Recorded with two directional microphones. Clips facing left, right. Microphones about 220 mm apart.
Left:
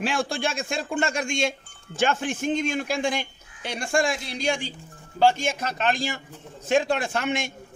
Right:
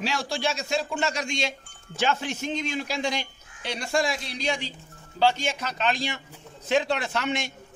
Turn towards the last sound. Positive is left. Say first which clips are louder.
# left 2 dB
turn(degrees=50)  # may be behind; listen again after turning